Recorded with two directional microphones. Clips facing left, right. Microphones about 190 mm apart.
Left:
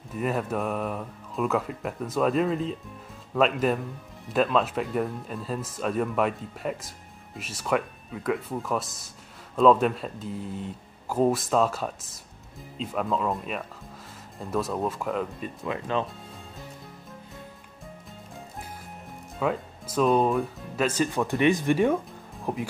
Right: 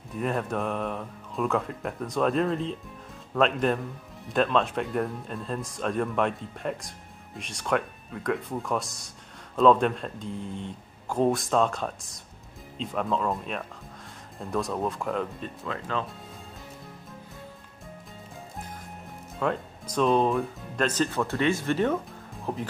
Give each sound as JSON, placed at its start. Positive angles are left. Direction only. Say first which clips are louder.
{"t": 0.1, "sound": "speech", "louder": "left 1 dB", "side_deg": 5}
{"t": 15.6, "sound": "speech", "louder": "left 4 dB", "side_deg": 20}
{"t": 19.4, "sound": "speech", "louder": "left 1 dB", "side_deg": 5}